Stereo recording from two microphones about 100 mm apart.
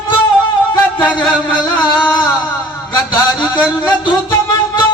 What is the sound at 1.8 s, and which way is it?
A man's voice, 45° left (ahead or behind).